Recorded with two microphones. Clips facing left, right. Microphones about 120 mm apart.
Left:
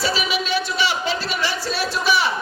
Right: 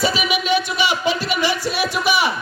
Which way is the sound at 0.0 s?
15° right (ahead or behind).